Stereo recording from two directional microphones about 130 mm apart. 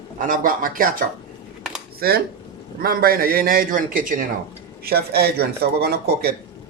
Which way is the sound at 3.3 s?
90° right.